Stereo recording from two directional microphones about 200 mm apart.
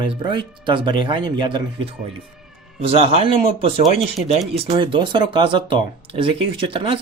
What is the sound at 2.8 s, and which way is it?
Speech, 30° right (ahead or behind).